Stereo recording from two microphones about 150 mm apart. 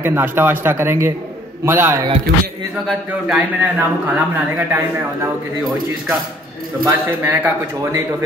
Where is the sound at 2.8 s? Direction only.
5° right (ahead or behind).